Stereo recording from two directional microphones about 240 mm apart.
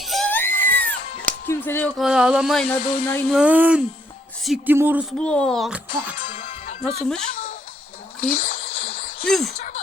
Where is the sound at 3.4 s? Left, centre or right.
Centre.